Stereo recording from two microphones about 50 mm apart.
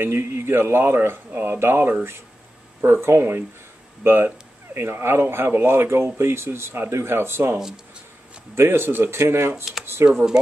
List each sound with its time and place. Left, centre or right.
0.0 s speech: right
7.5 s speech: centre
8.5 s speech: right
10.1 s speech: centre